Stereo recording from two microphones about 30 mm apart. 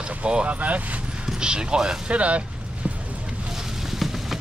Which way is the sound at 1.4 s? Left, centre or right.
Right.